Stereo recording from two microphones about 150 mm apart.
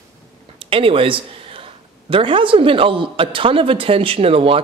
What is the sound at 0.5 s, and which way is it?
A man's voice, 35° right (ahead or behind).